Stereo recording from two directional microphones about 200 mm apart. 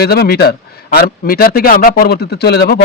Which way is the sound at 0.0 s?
50° left (ahead or behind).